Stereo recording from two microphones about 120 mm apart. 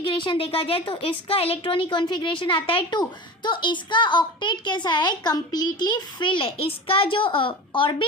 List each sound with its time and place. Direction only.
0.0 s a woman's voice: 40° left (ahead or behind)